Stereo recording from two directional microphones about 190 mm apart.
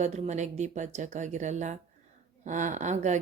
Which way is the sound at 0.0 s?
35° right (ahead or behind).